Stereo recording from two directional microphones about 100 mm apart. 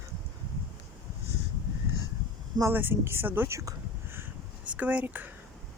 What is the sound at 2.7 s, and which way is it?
Speech, 20° right (ahead or behind).